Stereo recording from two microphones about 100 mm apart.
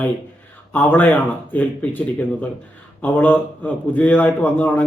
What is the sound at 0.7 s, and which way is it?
A man's voice, 15° left (ahead or behind).